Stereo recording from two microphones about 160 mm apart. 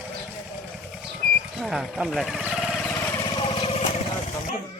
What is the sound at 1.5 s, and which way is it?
Speech, centre (ahead or behind).